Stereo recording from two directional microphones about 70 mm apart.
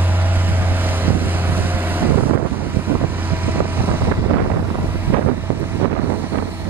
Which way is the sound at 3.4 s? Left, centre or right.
Right.